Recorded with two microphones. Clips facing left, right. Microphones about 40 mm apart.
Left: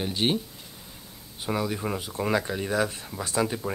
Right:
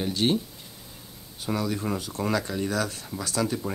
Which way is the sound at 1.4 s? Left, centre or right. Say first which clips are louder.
Even; centre.